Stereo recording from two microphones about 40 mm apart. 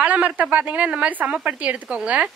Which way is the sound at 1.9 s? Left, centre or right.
Right.